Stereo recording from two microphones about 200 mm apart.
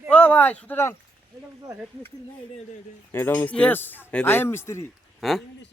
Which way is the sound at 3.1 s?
10° left (ahead or behind).